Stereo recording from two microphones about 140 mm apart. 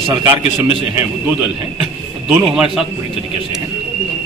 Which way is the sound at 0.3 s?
20° right (ahead or behind).